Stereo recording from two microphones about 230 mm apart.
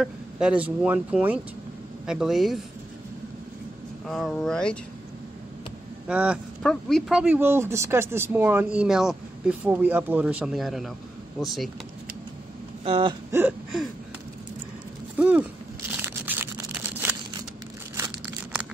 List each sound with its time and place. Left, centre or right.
0.0 s speech: centre
4.1 s speech: centre
6.0 s speech: centre
12.8 s speech: right
13.3 s a sound: centre
15.1 s a sound: centre
17.9 s crumpling: centre